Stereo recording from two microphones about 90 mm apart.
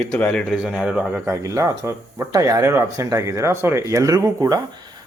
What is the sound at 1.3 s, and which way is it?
Speech, 35° right (ahead or behind).